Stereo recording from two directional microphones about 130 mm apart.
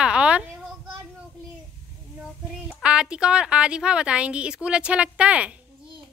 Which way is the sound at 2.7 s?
5° right (ahead or behind).